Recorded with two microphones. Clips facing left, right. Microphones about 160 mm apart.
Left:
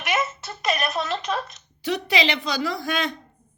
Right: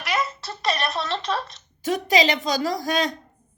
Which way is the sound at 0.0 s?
20° left (ahead or behind).